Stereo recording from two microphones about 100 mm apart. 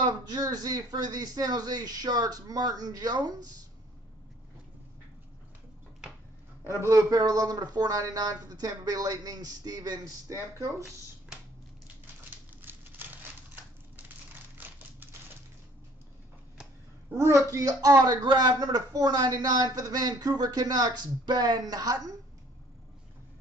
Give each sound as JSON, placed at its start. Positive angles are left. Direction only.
{"t": 0.0, "sound": "speech", "side_deg": -45}
{"t": 6.6, "sound": "speech", "side_deg": -30}
{"t": 12.6, "sound": "a sound", "side_deg": -20}
{"t": 14.6, "sound": "typewriter", "side_deg": -15}
{"t": 17.1, "sound": "speech", "side_deg": -30}